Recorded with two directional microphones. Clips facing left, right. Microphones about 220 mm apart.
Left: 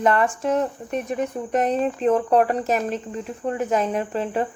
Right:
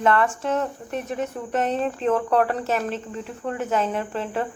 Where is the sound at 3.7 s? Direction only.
15° left (ahead or behind).